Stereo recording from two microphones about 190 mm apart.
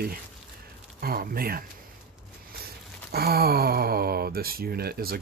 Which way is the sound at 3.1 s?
55° right (ahead or behind).